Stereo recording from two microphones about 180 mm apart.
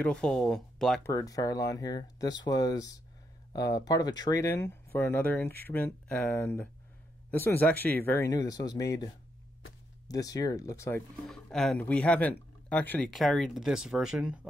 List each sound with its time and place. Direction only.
0.0 s speech: 5° left (ahead or behind)
1.0 s speech: 20° left (ahead or behind)
11.2 s speech: 5° left (ahead or behind)